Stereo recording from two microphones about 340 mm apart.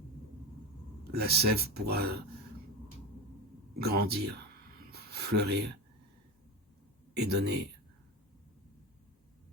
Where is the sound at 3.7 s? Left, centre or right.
Right.